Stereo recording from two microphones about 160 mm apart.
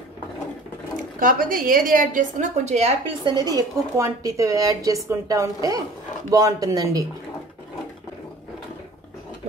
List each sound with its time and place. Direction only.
1.2 s a woman's voice: 60° right (ahead or behind)
3.1 s a woman's voice: 30° right (ahead or behind)